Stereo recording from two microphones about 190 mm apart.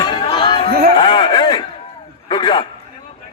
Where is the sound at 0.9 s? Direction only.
25° left (ahead or behind).